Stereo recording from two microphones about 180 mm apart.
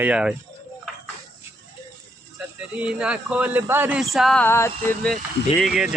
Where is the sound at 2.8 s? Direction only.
5° right (ahead or behind).